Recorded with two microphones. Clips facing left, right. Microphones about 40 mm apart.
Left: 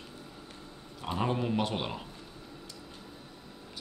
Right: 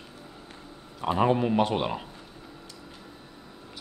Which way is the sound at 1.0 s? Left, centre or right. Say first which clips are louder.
Right 8 dB; right.